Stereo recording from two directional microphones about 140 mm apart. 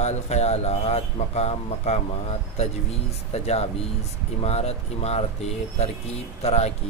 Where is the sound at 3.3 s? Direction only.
50° left (ahead or behind).